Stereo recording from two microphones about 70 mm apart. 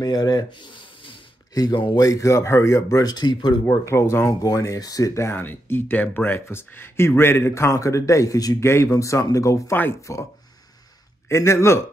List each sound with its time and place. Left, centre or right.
0.0 s speech: left
1.5 s speech: left
3.1 s speech: left
3.9 s speech: left
4.3 s speech: left
5.3 s speech: left
8.5 s speech: left
8.9 s speech: left